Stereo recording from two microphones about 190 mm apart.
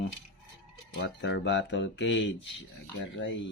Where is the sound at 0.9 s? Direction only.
70° left (ahead or behind).